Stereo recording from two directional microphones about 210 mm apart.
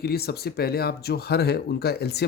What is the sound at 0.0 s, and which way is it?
Speech, 50° left (ahead or behind).